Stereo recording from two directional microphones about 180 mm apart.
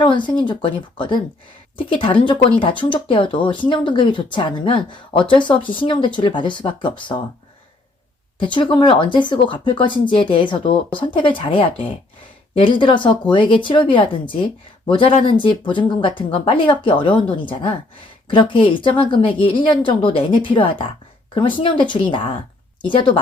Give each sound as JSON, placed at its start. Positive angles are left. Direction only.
{"t": 0.0, "sound": "speech", "side_deg": 25}
{"t": 8.4, "sound": "speech", "side_deg": 25}